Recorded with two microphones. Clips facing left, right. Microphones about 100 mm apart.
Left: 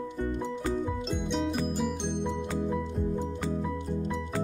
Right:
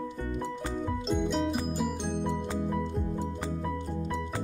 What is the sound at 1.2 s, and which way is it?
Music, centre (ahead or behind).